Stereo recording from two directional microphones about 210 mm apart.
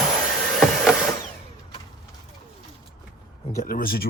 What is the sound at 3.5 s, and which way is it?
Speech, 40° left (ahead or behind).